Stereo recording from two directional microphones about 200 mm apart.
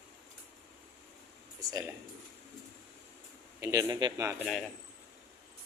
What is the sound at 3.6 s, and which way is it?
Speech, 15° right (ahead or behind).